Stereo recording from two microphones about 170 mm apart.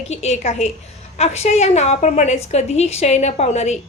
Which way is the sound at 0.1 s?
40° left (ahead or behind).